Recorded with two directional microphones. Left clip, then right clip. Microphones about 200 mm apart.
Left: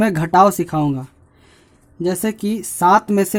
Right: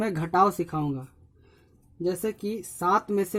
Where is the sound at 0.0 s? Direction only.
35° left (ahead or behind).